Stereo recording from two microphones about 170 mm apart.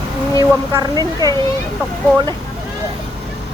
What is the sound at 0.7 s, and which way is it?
Speech, 20° right (ahead or behind).